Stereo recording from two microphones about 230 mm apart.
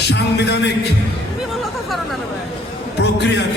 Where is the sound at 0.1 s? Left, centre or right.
Left.